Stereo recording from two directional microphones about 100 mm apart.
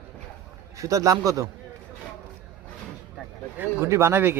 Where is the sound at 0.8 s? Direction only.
35° right (ahead or behind).